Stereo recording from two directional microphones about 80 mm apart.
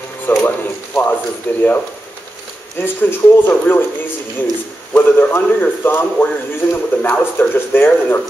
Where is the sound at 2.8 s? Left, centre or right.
Left.